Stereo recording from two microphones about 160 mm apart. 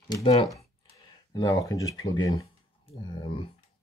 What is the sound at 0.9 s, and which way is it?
Speech, 25° left (ahead or behind).